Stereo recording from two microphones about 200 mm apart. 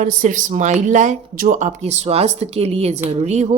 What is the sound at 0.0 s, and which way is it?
A woman's voice, 40° right (ahead or behind).